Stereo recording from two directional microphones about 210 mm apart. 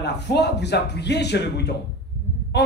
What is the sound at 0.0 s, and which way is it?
Speech, 55° left (ahead or behind).